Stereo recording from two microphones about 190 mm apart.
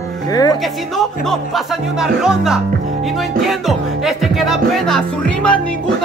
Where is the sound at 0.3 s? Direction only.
20° left (ahead or behind).